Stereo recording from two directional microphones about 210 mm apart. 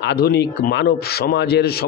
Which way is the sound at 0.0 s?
50° left (ahead or behind).